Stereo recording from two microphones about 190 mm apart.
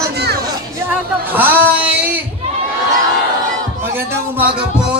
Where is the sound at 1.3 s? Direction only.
10° right (ahead or behind).